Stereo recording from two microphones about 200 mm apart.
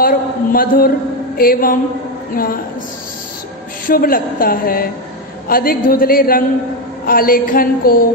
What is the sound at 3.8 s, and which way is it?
A woman's voice, 45° left (ahead or behind).